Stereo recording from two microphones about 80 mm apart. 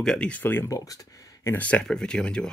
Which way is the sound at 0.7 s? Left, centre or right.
Left.